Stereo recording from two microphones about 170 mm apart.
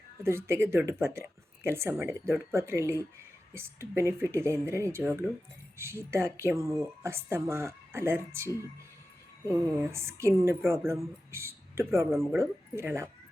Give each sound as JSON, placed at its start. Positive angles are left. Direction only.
{"t": 0.2, "sound": "speech", "side_deg": -15}
{"t": 12.1, "sound": "speech", "side_deg": 0}
{"t": 12.4, "sound": "speech", "side_deg": -15}